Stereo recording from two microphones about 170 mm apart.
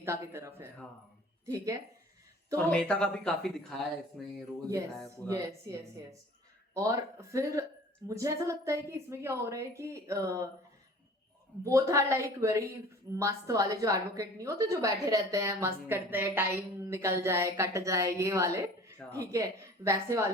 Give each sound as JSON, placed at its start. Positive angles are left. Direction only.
{"t": 0.0, "sound": "a woman's voice", "side_deg": -15}
{"t": 2.6, "sound": "speech", "side_deg": 5}
{"t": 5.6, "sound": "a woman's voice", "side_deg": -15}
{"t": 11.6, "sound": "a woman's voice", "side_deg": -20}